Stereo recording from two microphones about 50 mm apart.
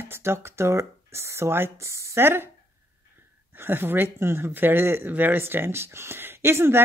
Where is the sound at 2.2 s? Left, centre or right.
Right.